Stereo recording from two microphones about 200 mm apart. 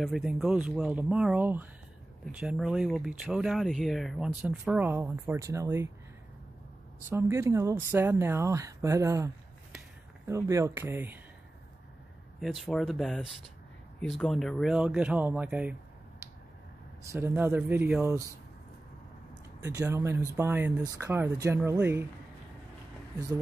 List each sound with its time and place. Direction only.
0.0 s speech: centre (ahead or behind)
7.1 s speech: 10° right (ahead or behind)
12.4 s speech: centre (ahead or behind)
17.0 s speech: 15° right (ahead or behind)
19.6 s speech: 15° right (ahead or behind)
23.1 s speech: 20° right (ahead or behind)